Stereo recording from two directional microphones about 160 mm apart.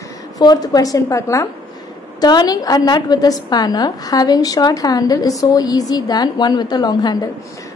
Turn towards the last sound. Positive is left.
turn(degrees=25)  # may be behind; listen again after turning